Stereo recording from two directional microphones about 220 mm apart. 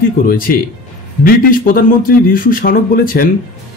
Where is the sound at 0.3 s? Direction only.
40° left (ahead or behind).